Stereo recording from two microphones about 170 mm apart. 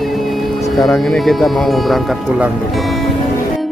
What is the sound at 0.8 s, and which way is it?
Speech, centre (ahead or behind).